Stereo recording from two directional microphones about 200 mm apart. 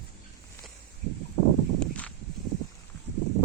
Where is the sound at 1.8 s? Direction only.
5° left (ahead or behind).